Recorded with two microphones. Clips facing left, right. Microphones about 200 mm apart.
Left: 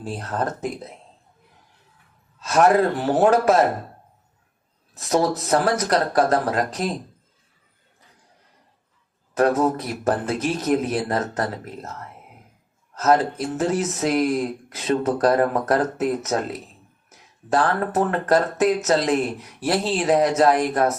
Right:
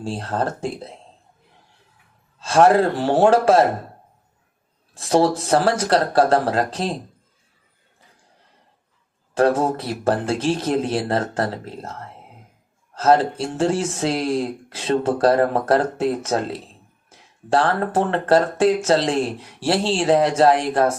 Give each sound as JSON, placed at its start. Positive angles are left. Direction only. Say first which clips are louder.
{"t": 0.0, "sound": "speech", "louder": "right 2 dB", "side_deg": -30}
{"t": 2.4, "sound": "speech", "louder": "right 2 dB", "side_deg": -30}
{"t": 4.9, "sound": "speech", "louder": "right 3 dB", "side_deg": -30}
{"t": 9.3, "sound": "speech", "louder": "right 1 dB", "side_deg": -30}